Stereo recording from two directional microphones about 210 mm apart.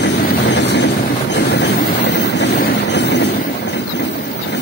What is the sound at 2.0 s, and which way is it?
Vehicle, 55° left (ahead or behind).